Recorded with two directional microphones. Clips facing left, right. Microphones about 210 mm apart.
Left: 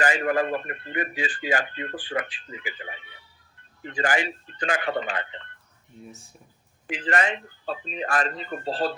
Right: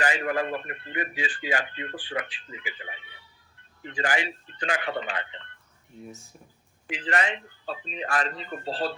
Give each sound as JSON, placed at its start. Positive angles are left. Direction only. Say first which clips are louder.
{"t": 0.0, "sound": "speech", "louder": "left 3 dB", "side_deg": 50}
{"t": 6.8, "sound": "speech", "louder": "left 3 dB", "side_deg": 45}